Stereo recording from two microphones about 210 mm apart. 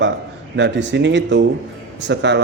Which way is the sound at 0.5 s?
55° right (ahead or behind).